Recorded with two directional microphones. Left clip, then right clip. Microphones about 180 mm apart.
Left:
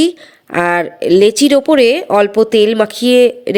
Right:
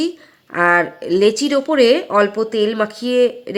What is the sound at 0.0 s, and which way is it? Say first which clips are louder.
Speech: left 8 dB; 30° left (ahead or behind).